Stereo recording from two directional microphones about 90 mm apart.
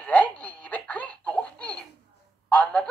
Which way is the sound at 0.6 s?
15° left (ahead or behind).